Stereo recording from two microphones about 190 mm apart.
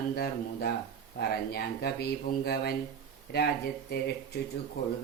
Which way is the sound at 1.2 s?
55° left (ahead or behind).